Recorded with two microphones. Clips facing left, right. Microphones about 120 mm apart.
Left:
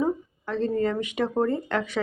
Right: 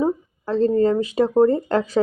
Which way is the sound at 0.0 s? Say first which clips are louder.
Right 4 dB; 30° right (ahead or behind).